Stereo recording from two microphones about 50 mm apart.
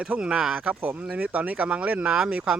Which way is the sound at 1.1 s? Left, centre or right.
Right.